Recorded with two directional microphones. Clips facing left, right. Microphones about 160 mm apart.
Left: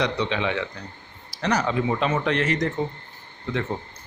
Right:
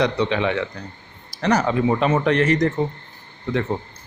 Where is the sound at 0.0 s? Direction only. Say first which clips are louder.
Right 4 dB; 50° right (ahead or behind).